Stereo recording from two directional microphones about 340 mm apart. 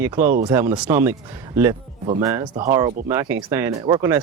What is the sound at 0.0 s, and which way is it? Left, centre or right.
Speech, centre.